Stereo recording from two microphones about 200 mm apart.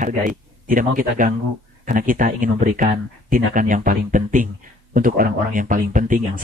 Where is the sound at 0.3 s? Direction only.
45° right (ahead or behind).